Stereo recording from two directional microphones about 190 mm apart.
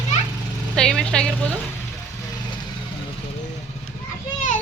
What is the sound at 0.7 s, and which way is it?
Speech, 5° left (ahead or behind).